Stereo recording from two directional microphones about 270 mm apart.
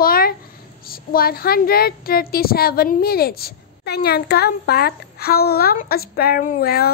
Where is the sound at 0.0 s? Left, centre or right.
Left.